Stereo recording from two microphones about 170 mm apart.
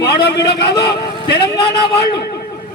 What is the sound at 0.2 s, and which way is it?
Speech, 75° left (ahead or behind).